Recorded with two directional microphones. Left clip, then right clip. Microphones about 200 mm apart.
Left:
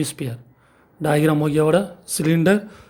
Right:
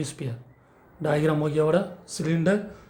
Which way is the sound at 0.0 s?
40° left (ahead or behind).